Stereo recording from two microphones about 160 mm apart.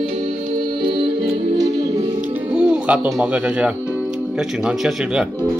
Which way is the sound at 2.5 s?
5° right (ahead or behind).